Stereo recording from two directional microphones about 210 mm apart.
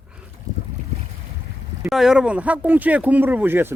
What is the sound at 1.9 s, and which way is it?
Speech, centre (ahead or behind).